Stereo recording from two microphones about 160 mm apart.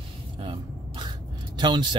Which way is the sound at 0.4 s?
30° right (ahead or behind).